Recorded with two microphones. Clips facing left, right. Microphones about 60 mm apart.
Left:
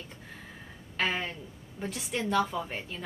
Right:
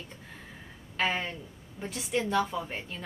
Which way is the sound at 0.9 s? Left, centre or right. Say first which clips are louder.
Right 1 dB; centre.